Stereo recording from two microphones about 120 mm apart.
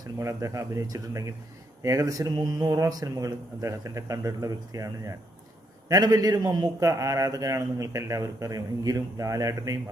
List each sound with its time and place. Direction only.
0.0 s a man's voice: 25° right (ahead or behind)